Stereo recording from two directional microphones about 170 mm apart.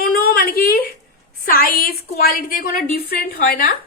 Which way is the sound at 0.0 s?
60° left (ahead or behind).